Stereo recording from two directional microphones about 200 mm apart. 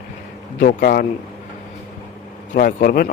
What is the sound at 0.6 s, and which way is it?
Speech, 45° left (ahead or behind).